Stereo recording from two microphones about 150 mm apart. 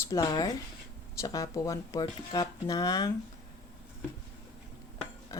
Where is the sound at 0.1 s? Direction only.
25° left (ahead or behind).